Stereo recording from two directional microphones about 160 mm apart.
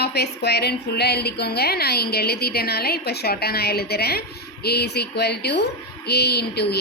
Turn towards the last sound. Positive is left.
turn(degrees=90)